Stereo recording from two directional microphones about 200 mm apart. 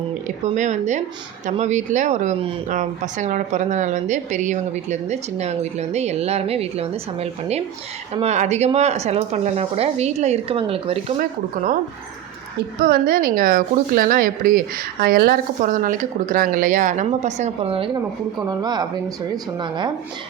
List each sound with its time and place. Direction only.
0.3 s speech: 35° right (ahead or behind)
11.2 s a woman's voice: 40° right (ahead or behind); by 19.9 s 20° right (ahead or behind)